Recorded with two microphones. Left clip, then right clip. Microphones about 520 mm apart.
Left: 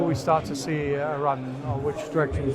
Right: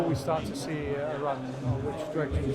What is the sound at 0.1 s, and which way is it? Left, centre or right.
Speech, left.